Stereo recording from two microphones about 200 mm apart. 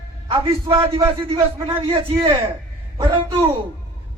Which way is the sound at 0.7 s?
25° right (ahead or behind).